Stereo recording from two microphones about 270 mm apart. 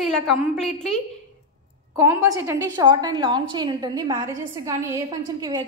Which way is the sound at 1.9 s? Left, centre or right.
Centre.